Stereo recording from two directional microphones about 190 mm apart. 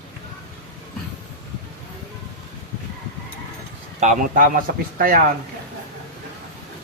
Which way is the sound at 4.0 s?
45° right (ahead or behind).